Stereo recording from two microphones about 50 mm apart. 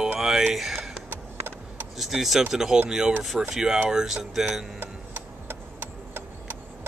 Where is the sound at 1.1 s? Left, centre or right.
Right.